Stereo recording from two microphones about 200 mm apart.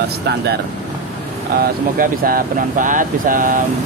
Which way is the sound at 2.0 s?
45° right (ahead or behind).